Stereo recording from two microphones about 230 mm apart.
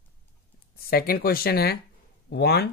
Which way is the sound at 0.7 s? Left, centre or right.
Left.